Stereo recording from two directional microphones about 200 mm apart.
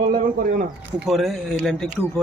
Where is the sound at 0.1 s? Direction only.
45° right (ahead or behind).